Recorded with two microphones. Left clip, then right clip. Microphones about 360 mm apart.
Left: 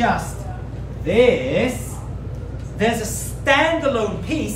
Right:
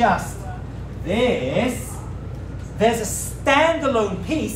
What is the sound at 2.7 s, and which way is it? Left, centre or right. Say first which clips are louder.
A woman's voice: right 2 dB; centre.